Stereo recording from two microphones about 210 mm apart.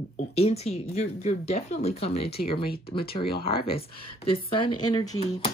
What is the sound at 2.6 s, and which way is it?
Speech, 45° left (ahead or behind).